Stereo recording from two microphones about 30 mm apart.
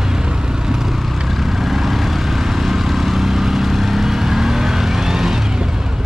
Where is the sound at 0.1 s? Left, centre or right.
Right.